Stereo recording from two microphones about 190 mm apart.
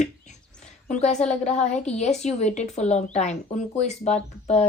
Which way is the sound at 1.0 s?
35° left (ahead or behind).